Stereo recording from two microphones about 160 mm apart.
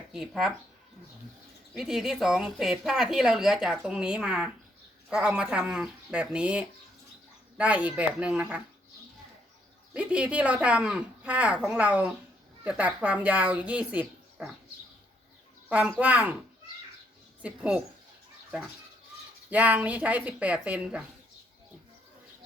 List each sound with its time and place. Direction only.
0.1 s a woman's voice: 5° right (ahead or behind)
1.7 s a woman's voice: 5° right (ahead or behind)
9.9 s speech: 10° right (ahead or behind)
15.7 s speech: 10° right (ahead or behind)
17.4 s speech: 10° right (ahead or behind)